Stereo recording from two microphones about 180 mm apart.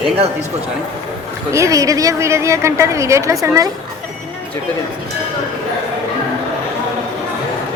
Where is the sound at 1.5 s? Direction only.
15° right (ahead or behind).